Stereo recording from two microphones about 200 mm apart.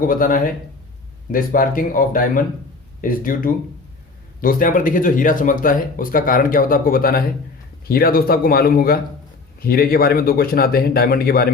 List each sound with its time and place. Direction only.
0.0 s speech: 45° left (ahead or behind)